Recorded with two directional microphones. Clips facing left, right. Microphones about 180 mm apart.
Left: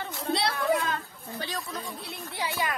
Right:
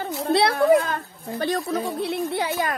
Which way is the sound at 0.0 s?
55° right (ahead or behind).